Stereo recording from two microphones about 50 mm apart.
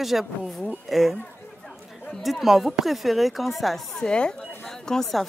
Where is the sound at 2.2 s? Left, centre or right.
Centre.